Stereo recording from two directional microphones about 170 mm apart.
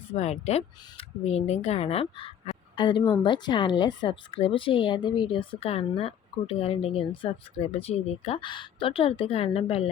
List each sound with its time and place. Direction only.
0.1 s speech: 40° left (ahead or behind)